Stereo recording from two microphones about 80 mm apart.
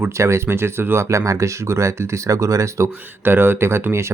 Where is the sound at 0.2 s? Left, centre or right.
Right.